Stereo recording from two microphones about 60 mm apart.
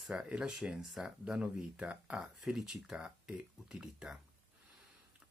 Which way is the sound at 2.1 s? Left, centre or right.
Centre.